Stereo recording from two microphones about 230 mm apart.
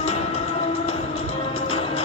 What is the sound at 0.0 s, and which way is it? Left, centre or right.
Music, left.